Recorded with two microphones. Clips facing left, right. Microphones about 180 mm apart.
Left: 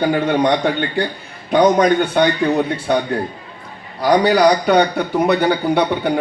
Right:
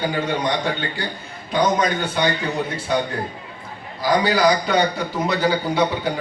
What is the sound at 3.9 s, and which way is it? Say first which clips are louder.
A man's voice: left 5 dB; 65° left (ahead or behind).